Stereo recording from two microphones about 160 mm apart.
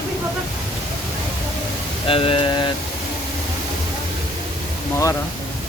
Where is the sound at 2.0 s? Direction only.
35° left (ahead or behind).